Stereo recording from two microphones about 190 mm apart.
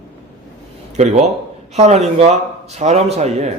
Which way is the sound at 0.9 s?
35° right (ahead or behind).